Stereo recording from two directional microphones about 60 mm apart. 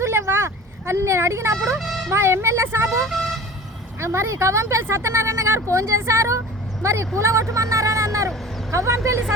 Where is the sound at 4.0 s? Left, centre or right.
Right.